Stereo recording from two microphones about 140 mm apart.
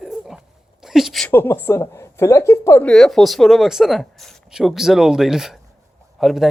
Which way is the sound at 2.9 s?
5° left (ahead or behind).